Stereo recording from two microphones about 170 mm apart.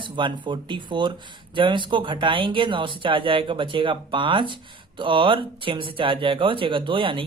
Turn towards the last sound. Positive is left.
turn(degrees=-30)  # may be behind; listen again after turning